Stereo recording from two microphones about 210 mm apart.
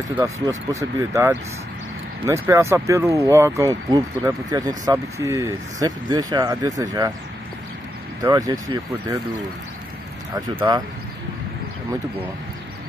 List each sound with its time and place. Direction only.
0.2 s speech: 15° right (ahead or behind)
8.2 s speech: 15° right (ahead or behind)
10.3 s speech: 15° right (ahead or behind)